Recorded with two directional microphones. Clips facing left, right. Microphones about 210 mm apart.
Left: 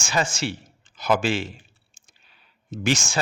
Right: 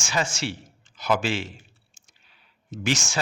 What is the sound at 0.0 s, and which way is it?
Speech, 50° left (ahead or behind).